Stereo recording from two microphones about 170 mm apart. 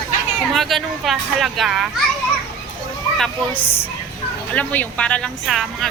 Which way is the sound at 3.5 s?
35° left (ahead or behind).